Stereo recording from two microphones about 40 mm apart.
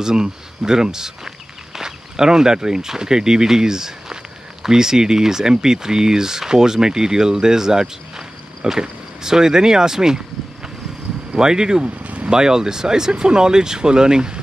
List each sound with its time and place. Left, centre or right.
0.0 s speech: centre
11.3 s speech: centre
11.8 s vehicle: right
12.3 s speech: centre